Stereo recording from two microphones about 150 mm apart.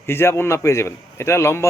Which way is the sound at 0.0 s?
15° left (ahead or behind).